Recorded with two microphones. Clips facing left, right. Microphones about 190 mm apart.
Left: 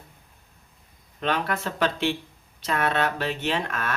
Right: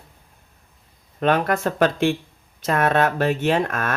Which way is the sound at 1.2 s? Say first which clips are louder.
Right 7 dB; 50° right (ahead or behind).